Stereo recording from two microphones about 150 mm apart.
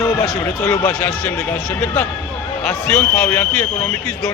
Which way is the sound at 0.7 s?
5° left (ahead or behind).